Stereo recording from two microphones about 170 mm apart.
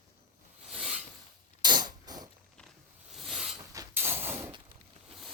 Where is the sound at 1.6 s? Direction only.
25° right (ahead or behind).